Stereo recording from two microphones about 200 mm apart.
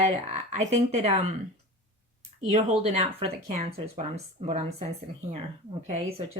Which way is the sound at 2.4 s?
30° right (ahead or behind).